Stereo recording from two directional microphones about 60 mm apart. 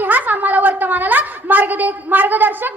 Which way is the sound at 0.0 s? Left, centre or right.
Right.